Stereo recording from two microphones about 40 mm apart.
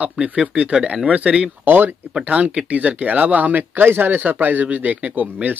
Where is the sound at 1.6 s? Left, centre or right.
Right.